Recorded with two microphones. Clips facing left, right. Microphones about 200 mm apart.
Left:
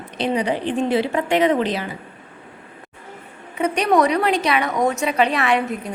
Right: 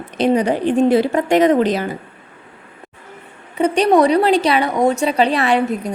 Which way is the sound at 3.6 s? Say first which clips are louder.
Right 4 dB; 30° right (ahead or behind).